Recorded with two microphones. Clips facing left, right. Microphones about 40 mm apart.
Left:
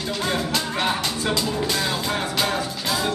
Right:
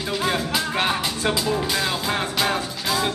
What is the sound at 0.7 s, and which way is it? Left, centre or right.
Speech, right.